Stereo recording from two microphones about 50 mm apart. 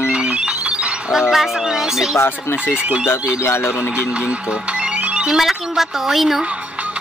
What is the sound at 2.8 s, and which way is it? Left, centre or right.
Speech, right.